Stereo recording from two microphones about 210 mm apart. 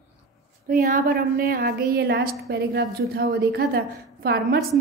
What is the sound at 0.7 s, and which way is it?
A woman's voice, 45° right (ahead or behind).